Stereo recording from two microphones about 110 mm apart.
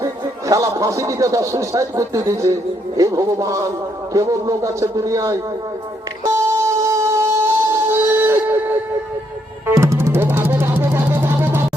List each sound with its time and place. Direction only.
0.0 s a man's voice: 30° right (ahead or behind)
6.2 s music: 25° right (ahead or behind)